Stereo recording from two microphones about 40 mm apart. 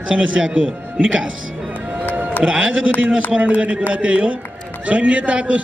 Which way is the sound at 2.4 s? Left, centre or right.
Right.